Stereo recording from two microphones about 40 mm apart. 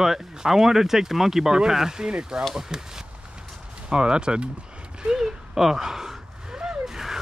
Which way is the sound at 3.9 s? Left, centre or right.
Right.